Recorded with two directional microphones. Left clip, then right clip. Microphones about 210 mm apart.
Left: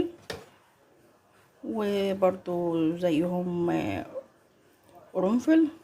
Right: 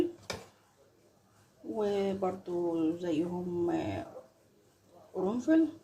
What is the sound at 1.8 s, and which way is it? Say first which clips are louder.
Speech: left 6 dB; 55° left (ahead or behind).